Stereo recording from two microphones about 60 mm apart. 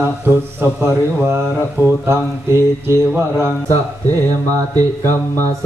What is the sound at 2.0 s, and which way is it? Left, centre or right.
Mantra, right.